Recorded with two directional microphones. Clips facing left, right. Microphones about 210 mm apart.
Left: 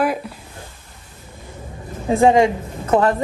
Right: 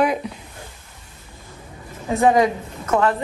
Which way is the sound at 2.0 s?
30° left (ahead or behind).